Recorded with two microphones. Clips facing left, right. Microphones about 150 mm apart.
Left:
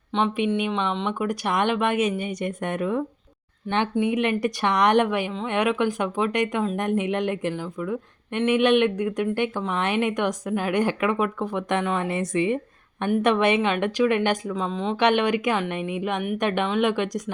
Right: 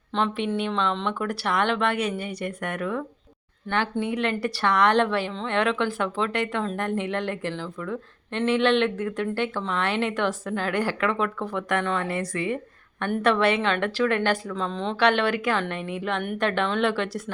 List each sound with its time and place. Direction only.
0.3 s speech: 15° left (ahead or behind)
4.0 s speech: 20° left (ahead or behind)
14.9 s speech: 20° left (ahead or behind)